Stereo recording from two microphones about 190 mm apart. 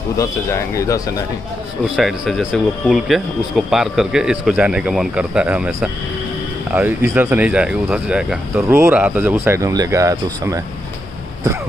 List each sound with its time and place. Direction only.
0.2 s speech: 15° left (ahead or behind)
2.0 s speech: centre (ahead or behind)